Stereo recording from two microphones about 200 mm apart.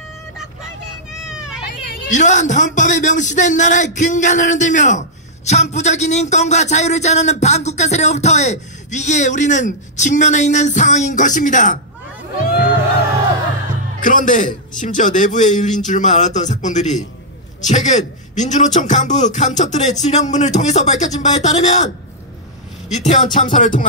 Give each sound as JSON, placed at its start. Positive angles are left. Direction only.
{"t": 1.2, "sound": "children playing", "side_deg": -5}
{"t": 2.0, "sound": "a man's voice", "side_deg": 40}
{"t": 13.9, "sound": "a man's voice", "side_deg": 40}
{"t": 22.8, "sound": "a man's voice", "side_deg": 40}